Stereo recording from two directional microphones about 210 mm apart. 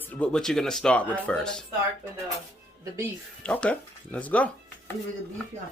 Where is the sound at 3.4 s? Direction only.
5° left (ahead or behind).